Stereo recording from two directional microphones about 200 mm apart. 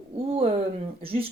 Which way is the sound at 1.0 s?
25° right (ahead or behind).